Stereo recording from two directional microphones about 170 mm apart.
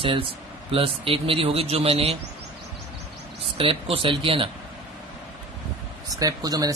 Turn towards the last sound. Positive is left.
turn(degrees=-20)  # may be behind; listen again after turning